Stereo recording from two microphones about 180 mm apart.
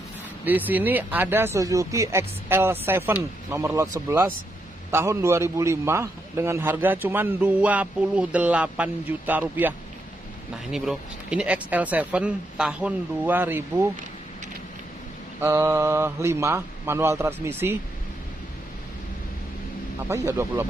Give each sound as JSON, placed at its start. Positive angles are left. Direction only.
{"t": 0.5, "sound": "a man's voice", "side_deg": -10}
{"t": 4.9, "sound": "a man's voice", "side_deg": -15}
{"t": 15.4, "sound": "a man's voice", "side_deg": -15}
{"t": 20.1, "sound": "a man's voice", "side_deg": -15}